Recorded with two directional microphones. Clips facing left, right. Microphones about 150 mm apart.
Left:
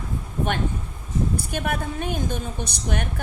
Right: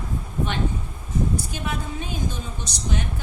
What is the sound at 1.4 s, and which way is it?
A woman's voice, 55° left (ahead or behind).